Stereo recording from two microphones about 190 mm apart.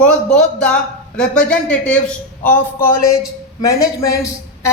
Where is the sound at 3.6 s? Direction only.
15° left (ahead or behind).